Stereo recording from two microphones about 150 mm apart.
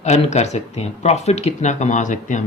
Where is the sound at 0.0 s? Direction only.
50° left (ahead or behind).